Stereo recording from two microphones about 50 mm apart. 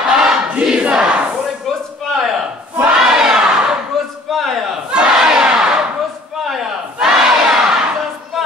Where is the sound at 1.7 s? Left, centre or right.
Centre.